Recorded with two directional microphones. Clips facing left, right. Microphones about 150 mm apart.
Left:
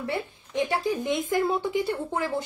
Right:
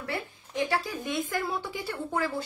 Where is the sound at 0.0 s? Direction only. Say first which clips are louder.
Left 4 dB; 20° left (ahead or behind).